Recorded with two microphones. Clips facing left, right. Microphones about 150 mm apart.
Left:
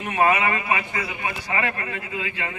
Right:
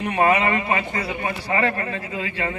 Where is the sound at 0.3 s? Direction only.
35° right (ahead or behind).